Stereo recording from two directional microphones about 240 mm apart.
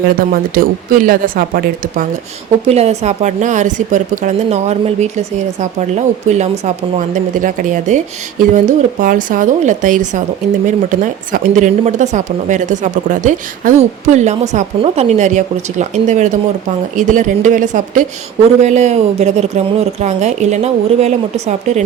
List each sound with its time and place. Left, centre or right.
0.2 s speech: right